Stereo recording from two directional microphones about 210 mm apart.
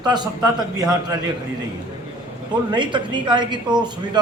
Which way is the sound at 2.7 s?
20° right (ahead or behind).